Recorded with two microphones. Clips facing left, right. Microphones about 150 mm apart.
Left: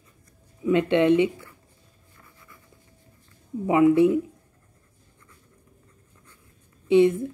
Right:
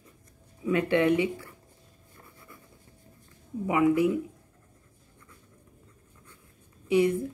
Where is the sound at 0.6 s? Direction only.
25° left (ahead or behind).